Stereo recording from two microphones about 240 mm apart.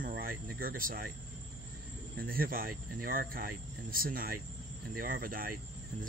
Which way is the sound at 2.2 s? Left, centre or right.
Right.